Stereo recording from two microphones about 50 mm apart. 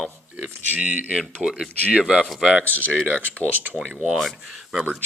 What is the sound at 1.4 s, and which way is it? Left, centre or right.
Speech, centre.